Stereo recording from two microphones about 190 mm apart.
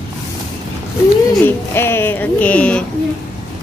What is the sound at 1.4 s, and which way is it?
Speech, 10° left (ahead or behind).